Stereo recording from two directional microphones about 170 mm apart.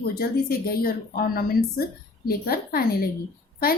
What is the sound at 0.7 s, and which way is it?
Speech, 60° left (ahead or behind).